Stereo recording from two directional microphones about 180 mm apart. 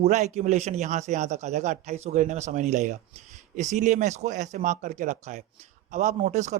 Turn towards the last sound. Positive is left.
turn(degrees=-40)  # may be behind; listen again after turning